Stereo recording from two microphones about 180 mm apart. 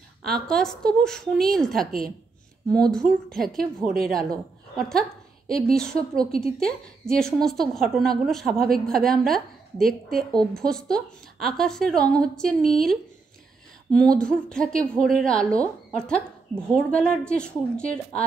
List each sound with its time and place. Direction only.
0.2 s a woman's voice: 5° left (ahead or behind)
1.9 s a woman's voice: 55° right (ahead or behind)
2.7 s a woman's voice: 5° left (ahead or behind)